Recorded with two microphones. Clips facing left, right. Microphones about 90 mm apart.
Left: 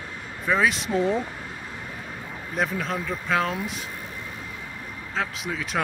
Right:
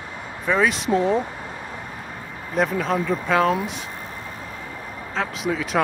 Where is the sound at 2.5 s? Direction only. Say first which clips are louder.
Right 5 dB; centre (ahead or behind).